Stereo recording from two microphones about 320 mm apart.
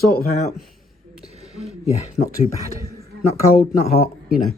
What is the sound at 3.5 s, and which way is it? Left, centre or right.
Speech, left.